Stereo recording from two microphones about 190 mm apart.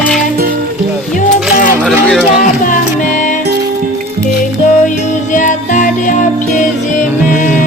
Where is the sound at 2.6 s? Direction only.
40° left (ahead or behind).